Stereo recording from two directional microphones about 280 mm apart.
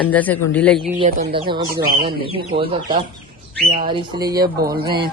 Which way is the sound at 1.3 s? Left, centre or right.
Centre.